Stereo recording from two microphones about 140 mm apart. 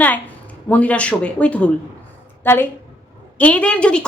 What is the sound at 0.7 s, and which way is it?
A woman's voice, 10° left (ahead or behind).